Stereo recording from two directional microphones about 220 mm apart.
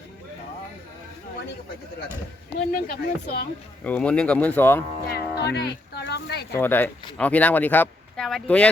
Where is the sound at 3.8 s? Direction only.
5° left (ahead or behind).